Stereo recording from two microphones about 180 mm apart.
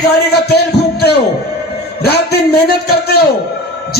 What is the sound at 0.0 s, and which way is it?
A man's voice, 65° left (ahead or behind).